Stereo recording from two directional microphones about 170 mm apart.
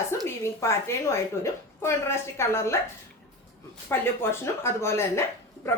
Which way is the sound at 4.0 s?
15° left (ahead or behind).